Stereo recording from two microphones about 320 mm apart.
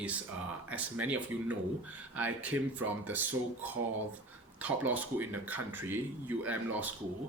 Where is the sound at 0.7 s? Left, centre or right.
Centre.